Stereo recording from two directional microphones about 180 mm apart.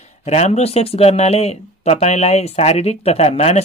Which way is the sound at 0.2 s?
35° left (ahead or behind).